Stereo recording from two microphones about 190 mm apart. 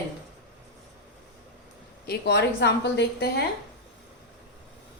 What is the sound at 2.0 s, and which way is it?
A woman's voice, 55° left (ahead or behind).